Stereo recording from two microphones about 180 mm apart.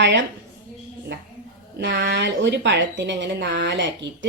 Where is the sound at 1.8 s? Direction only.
75° right (ahead or behind).